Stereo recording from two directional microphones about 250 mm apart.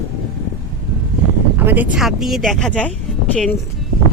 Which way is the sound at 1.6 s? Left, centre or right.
Centre.